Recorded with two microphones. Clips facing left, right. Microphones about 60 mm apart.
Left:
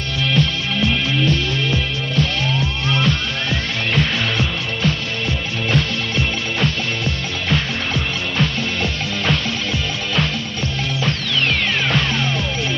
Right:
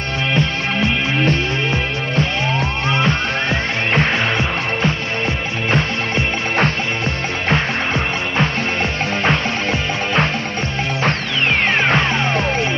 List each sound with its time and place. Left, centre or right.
0.3 s music: right
11.8 s music: right